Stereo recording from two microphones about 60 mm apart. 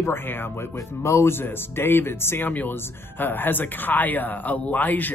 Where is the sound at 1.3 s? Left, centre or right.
Left.